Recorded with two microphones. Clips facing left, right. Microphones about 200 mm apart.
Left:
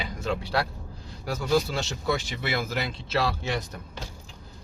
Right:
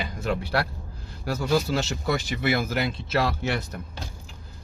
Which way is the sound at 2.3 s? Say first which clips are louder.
Right 4 dB; 50° right (ahead or behind).